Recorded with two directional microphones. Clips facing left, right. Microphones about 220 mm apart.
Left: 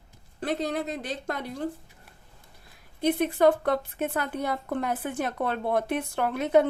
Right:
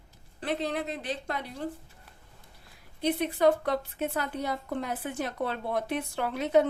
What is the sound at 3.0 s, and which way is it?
A woman's voice, 50° left (ahead or behind).